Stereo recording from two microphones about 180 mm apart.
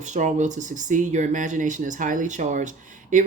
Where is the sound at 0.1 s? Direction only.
40° right (ahead or behind).